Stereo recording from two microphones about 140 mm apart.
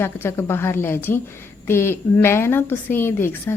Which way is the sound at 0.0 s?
15° left (ahead or behind).